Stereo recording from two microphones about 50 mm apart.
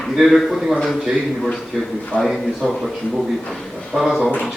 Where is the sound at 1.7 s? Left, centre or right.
Centre.